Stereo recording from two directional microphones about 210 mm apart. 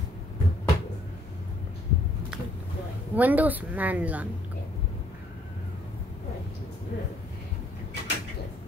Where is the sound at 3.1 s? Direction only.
10° right (ahead or behind).